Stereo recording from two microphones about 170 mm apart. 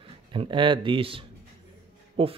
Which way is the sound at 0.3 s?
30° right (ahead or behind).